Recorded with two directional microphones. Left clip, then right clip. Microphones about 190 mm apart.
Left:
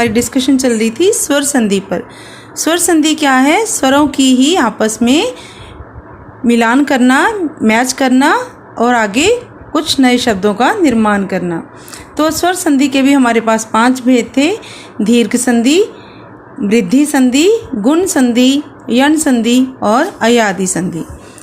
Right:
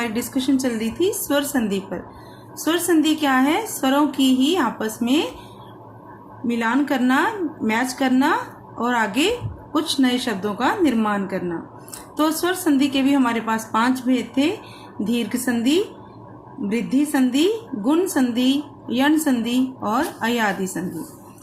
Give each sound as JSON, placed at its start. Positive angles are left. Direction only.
{"t": 0.0, "sound": "a woman's voice", "side_deg": 40}
{"t": 6.5, "sound": "a woman's voice", "side_deg": 45}